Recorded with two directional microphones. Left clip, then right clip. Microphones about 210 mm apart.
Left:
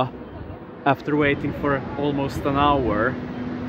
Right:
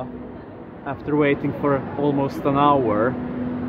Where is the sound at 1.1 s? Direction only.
Centre (ahead or behind).